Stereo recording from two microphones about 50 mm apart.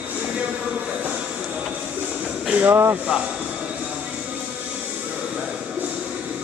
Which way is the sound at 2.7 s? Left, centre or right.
Right.